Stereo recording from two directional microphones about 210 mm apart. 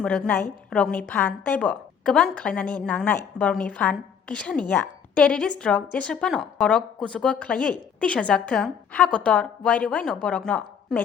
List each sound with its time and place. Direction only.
0.0 s a woman's voice: 5° left (ahead or behind)